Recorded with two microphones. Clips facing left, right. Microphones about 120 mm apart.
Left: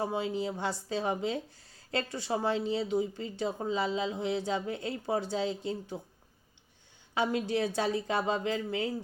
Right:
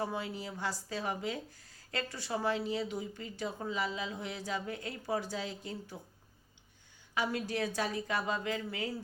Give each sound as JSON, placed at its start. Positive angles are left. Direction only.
{"t": 0.0, "sound": "a woman's voice", "side_deg": 25}
{"t": 7.1, "sound": "a woman's voice", "side_deg": 25}